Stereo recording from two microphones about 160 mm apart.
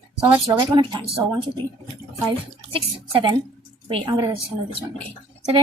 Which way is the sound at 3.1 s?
30° right (ahead or behind).